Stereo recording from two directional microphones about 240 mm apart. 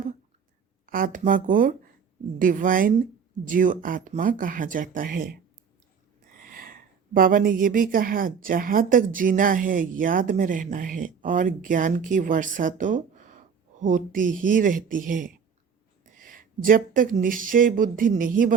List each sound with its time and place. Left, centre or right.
0.9 s speech: right
6.4 s speech: right